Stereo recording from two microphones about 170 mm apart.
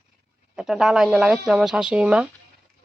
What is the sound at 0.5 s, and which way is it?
Speech, 5° right (ahead or behind).